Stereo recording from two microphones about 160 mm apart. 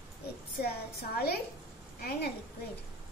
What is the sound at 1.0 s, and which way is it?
Speech, 70° left (ahead or behind).